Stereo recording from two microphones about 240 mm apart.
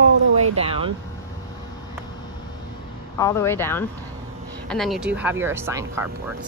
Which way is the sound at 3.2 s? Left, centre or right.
Centre.